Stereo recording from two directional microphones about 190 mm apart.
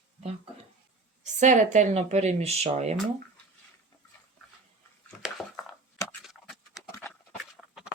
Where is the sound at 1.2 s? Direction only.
40° right (ahead or behind).